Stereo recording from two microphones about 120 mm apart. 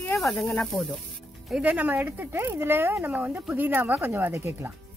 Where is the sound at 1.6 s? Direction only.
10° right (ahead or behind).